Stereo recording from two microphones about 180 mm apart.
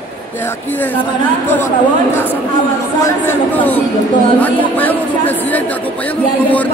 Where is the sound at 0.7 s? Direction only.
10° left (ahead or behind).